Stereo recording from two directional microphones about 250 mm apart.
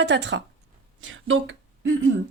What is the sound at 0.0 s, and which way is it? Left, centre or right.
Speech, right.